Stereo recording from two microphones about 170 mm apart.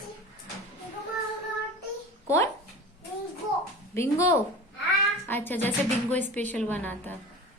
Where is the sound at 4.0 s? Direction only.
15° left (ahead or behind).